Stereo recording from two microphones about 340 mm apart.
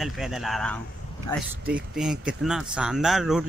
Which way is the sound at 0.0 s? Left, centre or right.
Centre.